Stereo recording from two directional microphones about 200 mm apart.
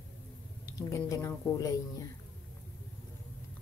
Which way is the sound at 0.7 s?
15° left (ahead or behind).